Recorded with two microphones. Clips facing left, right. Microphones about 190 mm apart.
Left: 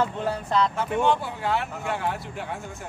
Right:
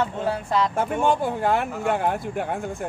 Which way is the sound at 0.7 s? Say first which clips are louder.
Right 1 dB; 50° right (ahead or behind).